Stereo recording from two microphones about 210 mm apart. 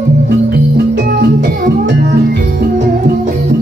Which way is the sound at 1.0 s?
50° right (ahead or behind).